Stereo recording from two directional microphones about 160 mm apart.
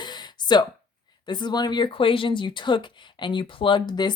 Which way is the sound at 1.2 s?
30° left (ahead or behind).